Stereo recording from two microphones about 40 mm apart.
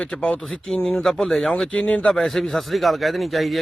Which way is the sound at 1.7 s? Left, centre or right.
Left.